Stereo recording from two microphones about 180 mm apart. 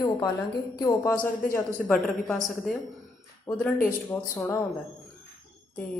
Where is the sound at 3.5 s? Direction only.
25° left (ahead or behind).